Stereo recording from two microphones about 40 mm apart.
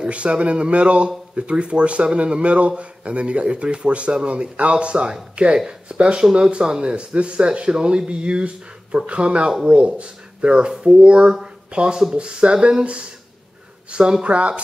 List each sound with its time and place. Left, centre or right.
0.0 s speech: right
13.8 s speech: right